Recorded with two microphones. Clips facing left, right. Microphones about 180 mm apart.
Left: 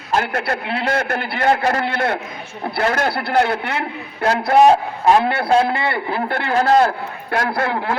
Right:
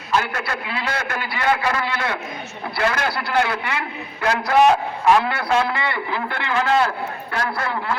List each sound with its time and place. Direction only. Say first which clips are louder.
0.1 s a man's voice: left 3 dB; 55° left (ahead or behind)
4.2 s a man's voice: left 3 dB; 35° left (ahead or behind)
6.1 s a man's voice: left 4 dB; 45° left (ahead or behind)